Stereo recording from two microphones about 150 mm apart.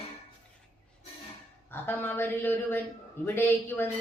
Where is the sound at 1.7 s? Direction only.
15° left (ahead or behind).